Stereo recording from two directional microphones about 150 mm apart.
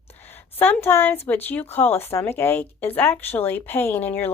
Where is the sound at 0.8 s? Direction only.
15° left (ahead or behind).